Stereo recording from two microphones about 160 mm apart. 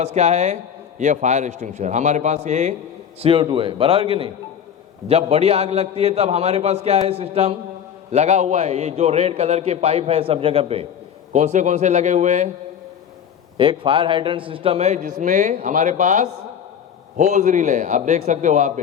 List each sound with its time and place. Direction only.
0.0 s a man's voice: 45° right (ahead or behind)
3.2 s a man's voice: 35° right (ahead or behind)
13.6 s a man's voice: 35° right (ahead or behind); by 18.7 s 50° right (ahead or behind)